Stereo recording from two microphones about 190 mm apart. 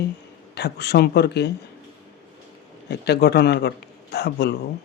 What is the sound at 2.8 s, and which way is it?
Speech, 60° left (ahead or behind).